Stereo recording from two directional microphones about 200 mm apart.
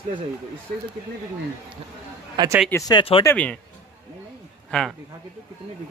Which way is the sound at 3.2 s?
5° left (ahead or behind).